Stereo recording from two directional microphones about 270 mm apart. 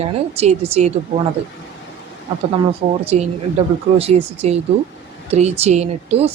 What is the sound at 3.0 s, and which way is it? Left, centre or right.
Speech, right.